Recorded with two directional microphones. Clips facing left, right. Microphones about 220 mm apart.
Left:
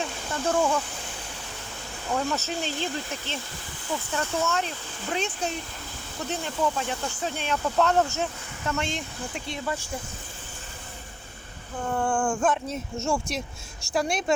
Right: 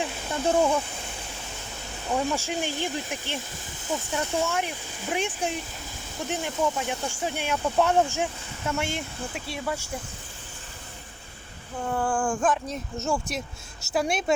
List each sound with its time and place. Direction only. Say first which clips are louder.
0.0 s a sound: right 2 dB; 15° right (ahead or behind)
2.0 s speech: right 1 dB; 10° right (ahead or behind)
11.9 s speech: left 1 dB; centre (ahead or behind)